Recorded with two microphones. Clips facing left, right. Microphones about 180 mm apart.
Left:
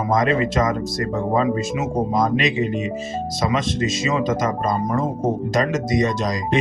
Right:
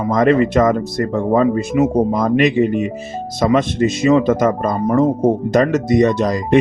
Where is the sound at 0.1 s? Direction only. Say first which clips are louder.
Right 6 dB; 60° right (ahead or behind).